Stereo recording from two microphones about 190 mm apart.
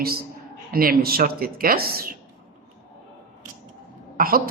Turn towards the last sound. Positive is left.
turn(degrees=-50)  # may be behind; listen again after turning